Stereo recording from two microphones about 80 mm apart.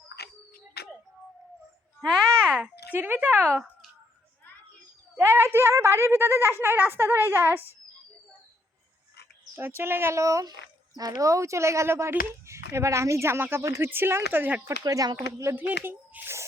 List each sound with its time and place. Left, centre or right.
2.4 s a child's voice: centre
5.1 s a woman's voice: right
9.6 s speech: right
14.8 s speech: right
15.5 s a child's voice: right